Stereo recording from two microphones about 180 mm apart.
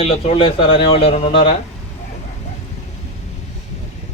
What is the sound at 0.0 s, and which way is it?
Speech, 35° left (ahead or behind).